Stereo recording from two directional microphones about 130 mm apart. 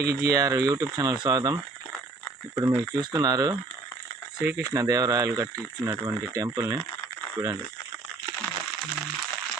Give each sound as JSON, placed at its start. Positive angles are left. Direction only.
{"t": 0.0, "sound": "speech", "side_deg": -25}
{"t": 2.9, "sound": "speech", "side_deg": -30}